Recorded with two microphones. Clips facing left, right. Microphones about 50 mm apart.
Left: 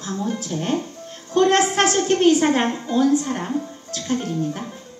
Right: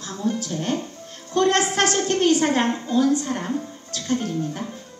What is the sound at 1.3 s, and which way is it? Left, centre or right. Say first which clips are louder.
Music: left 3 dB; left.